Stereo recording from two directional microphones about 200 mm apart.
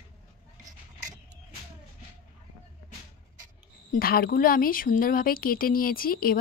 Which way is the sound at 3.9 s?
50° left (ahead or behind).